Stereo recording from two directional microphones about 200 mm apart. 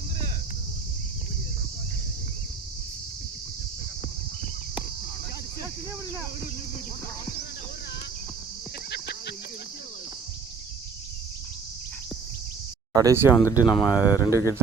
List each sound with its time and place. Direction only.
8.9 s a sound: 55° left (ahead or behind)
12.9 s speech: 15° right (ahead or behind)
13.4 s speech: 15° left (ahead or behind)
13.7 s speech: 5° right (ahead or behind)